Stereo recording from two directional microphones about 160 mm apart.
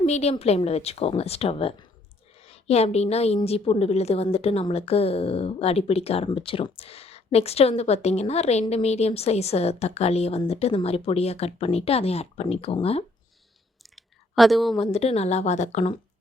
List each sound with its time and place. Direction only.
0.0 s a woman's voice: 40° left (ahead or behind)
13.8 s a sound: centre (ahead or behind)
14.9 s a woman's voice: 40° left (ahead or behind)